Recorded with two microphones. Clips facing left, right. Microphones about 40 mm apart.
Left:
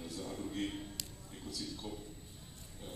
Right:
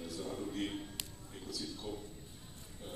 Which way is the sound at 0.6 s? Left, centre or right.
Right.